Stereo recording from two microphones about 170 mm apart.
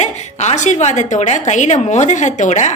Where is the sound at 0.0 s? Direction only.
40° left (ahead or behind).